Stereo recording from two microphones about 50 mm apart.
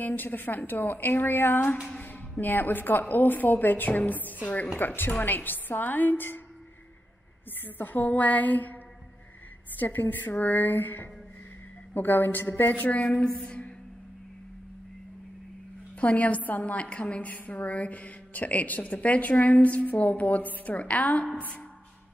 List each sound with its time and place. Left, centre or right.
0.0 s a woman's voice: left
7.6 s a woman's voice: left
9.8 s a woman's voice: left
13.2 s a sound: left
16.0 s a woman's voice: left
16.8 s a woman's voice: left